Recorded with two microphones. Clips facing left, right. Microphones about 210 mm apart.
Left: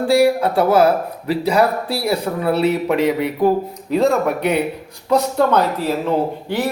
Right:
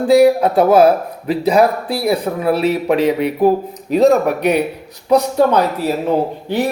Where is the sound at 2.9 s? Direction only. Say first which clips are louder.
Right 3 dB; 20° right (ahead or behind).